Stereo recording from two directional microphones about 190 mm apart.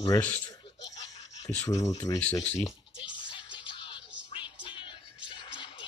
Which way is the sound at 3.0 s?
25° left (ahead or behind).